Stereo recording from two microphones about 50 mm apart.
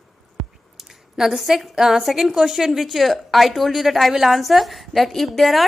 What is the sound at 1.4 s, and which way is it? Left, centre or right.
A woman's voice, centre.